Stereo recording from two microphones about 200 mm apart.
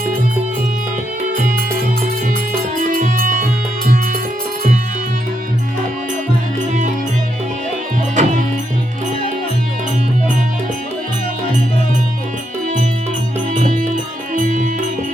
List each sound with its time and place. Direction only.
2.7 s music: 45° right (ahead or behind)
8.1 s music: 40° right (ahead or behind)
13.5 s music: 40° right (ahead or behind)